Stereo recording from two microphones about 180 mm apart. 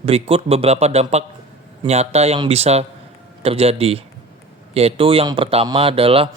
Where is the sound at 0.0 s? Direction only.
35° right (ahead or behind).